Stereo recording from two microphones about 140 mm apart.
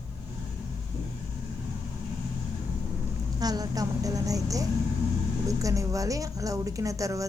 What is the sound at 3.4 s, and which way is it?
A woman's voice, 25° right (ahead or behind).